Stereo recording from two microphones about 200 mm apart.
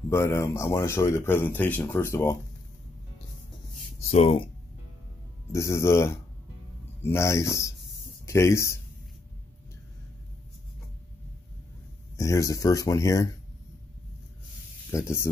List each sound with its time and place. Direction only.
0.1 s speech: 15° left (ahead or behind)
4.1 s speech: 35° left (ahead or behind)
5.5 s speech: 15° left (ahead or behind)
12.2 s speech: 15° left (ahead or behind)
14.9 s speech: 15° left (ahead or behind)